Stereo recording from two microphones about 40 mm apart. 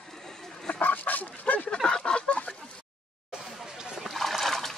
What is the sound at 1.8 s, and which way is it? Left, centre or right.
Fowl, left.